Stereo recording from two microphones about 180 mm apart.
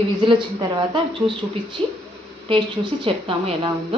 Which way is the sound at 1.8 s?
30° right (ahead or behind).